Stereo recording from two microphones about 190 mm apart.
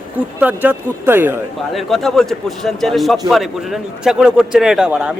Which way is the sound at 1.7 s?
Centre (ahead or behind).